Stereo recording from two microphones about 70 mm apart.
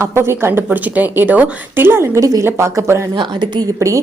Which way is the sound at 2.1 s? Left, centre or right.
Right.